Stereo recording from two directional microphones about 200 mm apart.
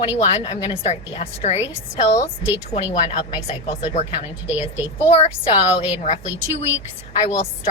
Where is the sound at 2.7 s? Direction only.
30° left (ahead or behind).